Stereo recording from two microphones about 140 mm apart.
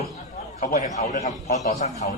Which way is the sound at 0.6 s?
60° left (ahead or behind).